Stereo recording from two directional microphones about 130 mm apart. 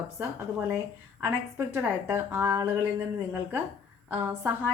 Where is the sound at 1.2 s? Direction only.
20° right (ahead or behind).